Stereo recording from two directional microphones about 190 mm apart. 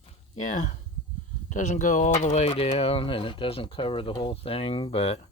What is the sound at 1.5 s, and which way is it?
Speech, 40° left (ahead or behind).